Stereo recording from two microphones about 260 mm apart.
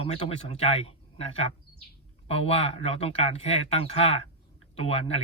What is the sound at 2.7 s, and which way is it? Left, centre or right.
Speech, left.